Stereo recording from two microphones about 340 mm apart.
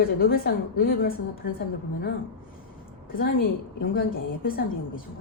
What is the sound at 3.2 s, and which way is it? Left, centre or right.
A woman's voice, left.